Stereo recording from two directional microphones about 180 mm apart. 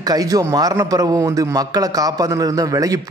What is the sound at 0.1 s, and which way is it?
A man's voice, 20° right (ahead or behind).